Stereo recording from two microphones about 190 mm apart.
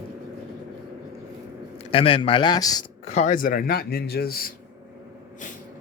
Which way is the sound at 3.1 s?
35° left (ahead or behind).